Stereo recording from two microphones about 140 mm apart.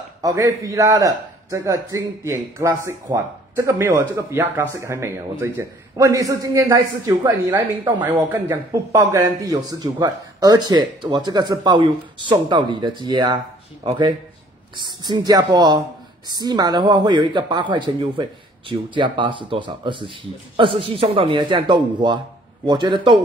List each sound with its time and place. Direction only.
0.2 s a man's voice: 25° right (ahead or behind)
14.8 s a man's voice: 30° right (ahead or behind)